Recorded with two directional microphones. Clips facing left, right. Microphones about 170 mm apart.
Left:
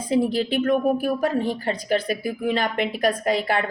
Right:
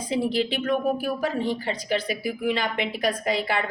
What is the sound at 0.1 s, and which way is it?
Speech, 50° left (ahead or behind).